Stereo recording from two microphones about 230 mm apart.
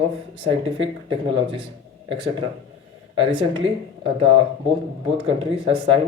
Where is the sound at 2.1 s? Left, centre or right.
Right.